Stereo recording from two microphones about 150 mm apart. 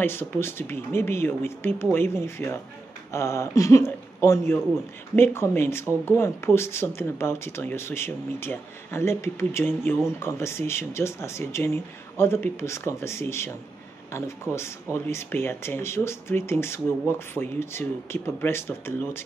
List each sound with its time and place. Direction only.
0.0 s speech: 15° left (ahead or behind)